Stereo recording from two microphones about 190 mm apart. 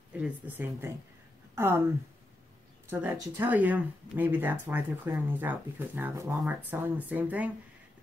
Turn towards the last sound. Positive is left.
turn(degrees=-10)  # may be behind; listen again after turning